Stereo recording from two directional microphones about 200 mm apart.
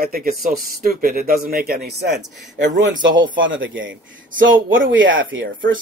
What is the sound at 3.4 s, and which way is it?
Speech, 70° right (ahead or behind).